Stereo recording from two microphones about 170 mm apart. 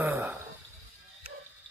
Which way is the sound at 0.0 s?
10° right (ahead or behind).